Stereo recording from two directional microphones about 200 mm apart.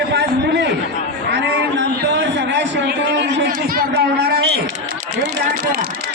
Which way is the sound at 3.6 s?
45° right (ahead or behind).